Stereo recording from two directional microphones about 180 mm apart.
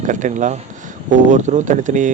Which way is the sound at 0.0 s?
45° right (ahead or behind).